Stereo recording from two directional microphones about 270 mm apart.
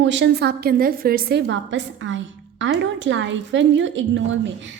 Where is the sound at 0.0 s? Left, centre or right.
Right.